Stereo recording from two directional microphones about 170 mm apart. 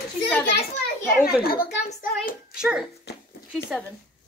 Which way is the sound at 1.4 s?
60° left (ahead or behind).